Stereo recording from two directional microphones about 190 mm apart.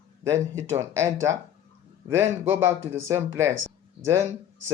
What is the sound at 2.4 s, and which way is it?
Speech, 10° right (ahead or behind).